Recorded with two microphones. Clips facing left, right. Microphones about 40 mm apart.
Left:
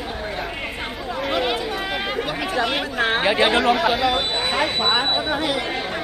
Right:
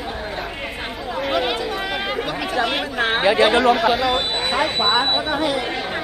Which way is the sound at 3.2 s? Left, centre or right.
Centre.